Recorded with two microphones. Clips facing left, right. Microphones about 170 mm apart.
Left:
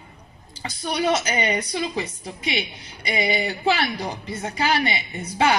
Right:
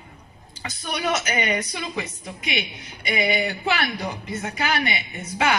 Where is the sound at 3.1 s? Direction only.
30° left (ahead or behind).